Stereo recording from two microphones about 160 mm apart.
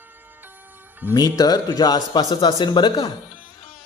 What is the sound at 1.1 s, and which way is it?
Speech, 25° left (ahead or behind).